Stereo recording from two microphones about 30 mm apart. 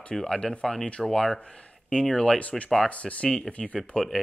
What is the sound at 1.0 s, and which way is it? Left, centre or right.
Speech, centre.